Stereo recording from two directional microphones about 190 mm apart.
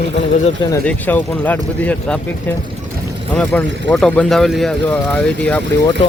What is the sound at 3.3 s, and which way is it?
Speech, 5° left (ahead or behind).